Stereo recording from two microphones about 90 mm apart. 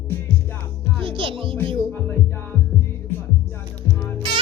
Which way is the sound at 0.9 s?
80° right.